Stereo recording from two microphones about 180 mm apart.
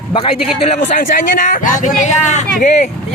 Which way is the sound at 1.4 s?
45° left (ahead or behind).